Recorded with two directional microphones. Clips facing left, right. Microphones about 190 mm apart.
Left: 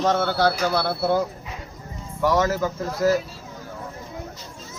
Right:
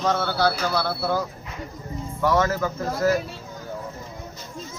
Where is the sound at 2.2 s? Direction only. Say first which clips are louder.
Left 1 dB; 15° left (ahead or behind).